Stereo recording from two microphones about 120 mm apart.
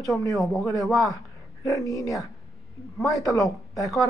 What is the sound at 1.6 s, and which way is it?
Speech, 30° left (ahead or behind).